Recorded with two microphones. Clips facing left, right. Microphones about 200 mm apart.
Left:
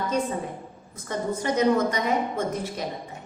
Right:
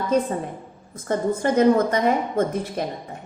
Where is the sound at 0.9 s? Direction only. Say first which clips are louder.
Right 5 dB; 50° right (ahead or behind).